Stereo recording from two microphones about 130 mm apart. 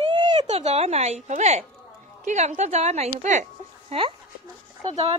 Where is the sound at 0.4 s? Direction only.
55° right (ahead or behind).